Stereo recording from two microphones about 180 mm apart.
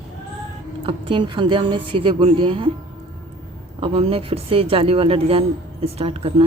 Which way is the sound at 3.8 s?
30° right (ahead or behind).